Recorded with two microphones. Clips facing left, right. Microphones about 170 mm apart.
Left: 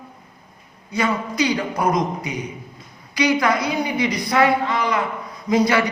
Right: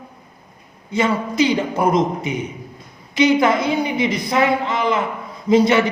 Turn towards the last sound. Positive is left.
turn(degrees=-25)  # may be behind; listen again after turning